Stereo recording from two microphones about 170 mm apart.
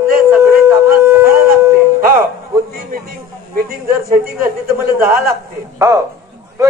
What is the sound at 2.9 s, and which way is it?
Speech, 60° right (ahead or behind).